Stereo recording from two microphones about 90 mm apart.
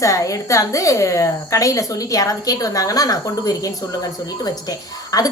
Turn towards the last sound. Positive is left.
turn(degrees=45)  # may be behind; listen again after turning